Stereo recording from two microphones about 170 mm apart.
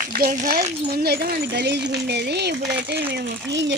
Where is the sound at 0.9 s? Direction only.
70° right (ahead or behind).